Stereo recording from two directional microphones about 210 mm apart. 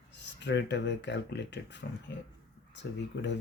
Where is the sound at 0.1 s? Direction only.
55° left (ahead or behind).